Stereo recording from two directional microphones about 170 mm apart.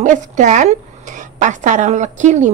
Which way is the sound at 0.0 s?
45° right (ahead or behind).